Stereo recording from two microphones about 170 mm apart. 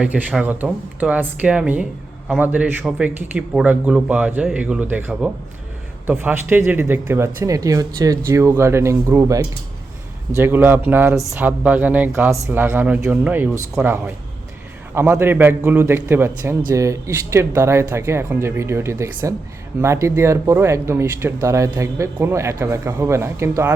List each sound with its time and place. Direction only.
0.0 s speech: 10° right (ahead or behind)